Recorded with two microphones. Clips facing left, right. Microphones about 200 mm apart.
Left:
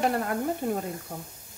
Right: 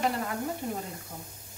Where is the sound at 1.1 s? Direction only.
60° left (ahead or behind).